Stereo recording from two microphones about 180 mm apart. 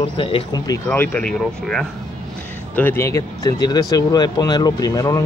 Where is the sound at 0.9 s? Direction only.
10° left (ahead or behind).